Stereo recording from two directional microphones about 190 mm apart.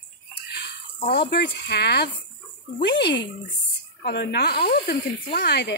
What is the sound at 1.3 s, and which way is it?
Speech, 60° left (ahead or behind).